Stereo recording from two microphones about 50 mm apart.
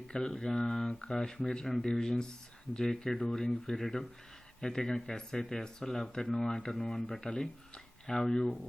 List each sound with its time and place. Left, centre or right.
0.1 s speech: centre